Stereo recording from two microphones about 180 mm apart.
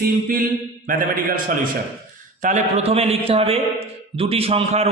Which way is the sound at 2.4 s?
40° right (ahead or behind).